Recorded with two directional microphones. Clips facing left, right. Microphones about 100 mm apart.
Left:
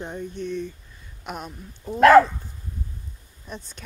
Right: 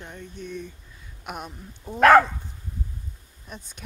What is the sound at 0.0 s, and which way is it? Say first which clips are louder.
Speech: left 8 dB; 20° left (ahead or behind).